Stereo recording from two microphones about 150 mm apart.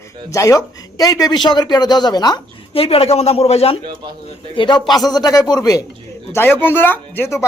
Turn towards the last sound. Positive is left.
turn(degrees=15)  # may be behind; listen again after turning